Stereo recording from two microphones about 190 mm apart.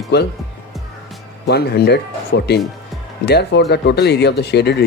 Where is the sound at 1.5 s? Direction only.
60° left (ahead or behind).